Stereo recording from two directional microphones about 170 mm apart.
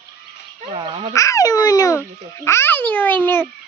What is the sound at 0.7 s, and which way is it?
Speech, 30° right (ahead or behind).